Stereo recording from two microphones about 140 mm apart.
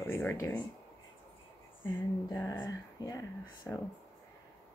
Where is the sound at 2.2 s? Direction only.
25° left (ahead or behind).